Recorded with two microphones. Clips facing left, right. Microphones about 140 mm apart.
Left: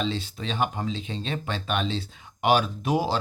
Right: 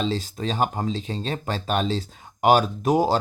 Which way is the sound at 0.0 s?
40° right (ahead or behind).